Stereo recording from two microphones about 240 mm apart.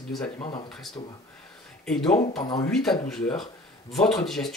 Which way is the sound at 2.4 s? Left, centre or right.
Centre.